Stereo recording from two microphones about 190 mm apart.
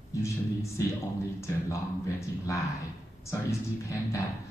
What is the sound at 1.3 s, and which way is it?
Speech, 15° left (ahead or behind).